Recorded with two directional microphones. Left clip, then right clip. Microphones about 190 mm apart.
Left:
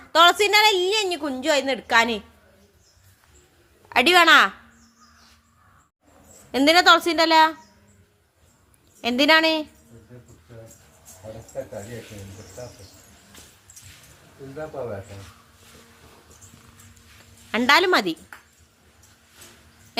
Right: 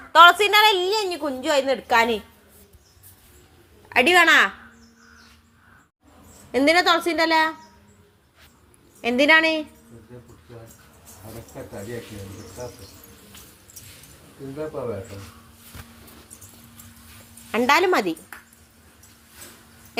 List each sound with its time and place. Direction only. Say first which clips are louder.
0.1 s a woman's voice: right 3 dB; 50° left (ahead or behind)
0.9 s a woman's voice: left 1 dB; 30° left (ahead or behind)
3.8 s a woman's voice: even; 20° left (ahead or behind)
6.5 s a woman's voice: left 2 dB; 25° left (ahead or behind)
9.0 s a woman's voice: right 1 dB; 25° left (ahead or behind)
17.5 s a woman's voice: left 1 dB; 25° left (ahead or behind)